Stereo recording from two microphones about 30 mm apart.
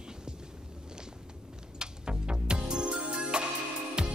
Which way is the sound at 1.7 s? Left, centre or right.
Right.